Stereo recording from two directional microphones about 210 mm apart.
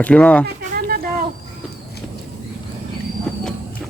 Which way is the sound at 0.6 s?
45° right (ahead or behind).